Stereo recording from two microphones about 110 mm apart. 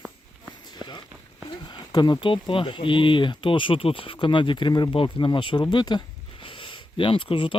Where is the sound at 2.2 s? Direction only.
50° left (ahead or behind).